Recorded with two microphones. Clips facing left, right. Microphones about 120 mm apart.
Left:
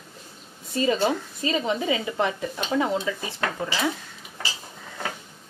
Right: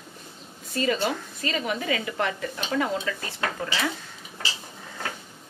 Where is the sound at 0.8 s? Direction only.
20° left (ahead or behind).